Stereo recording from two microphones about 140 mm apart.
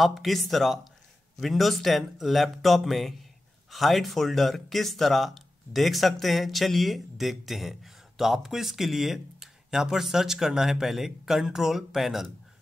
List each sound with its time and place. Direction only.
0.0 s speech: centre (ahead or behind)